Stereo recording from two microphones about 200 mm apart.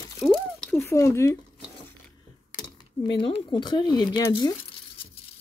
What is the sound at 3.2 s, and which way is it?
Speech, 25° left (ahead or behind).